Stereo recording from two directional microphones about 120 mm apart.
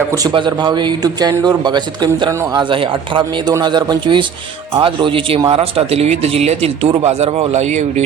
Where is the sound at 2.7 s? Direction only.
45° right (ahead or behind).